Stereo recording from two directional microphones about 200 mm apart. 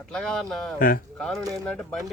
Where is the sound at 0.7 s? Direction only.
45° left (ahead or behind).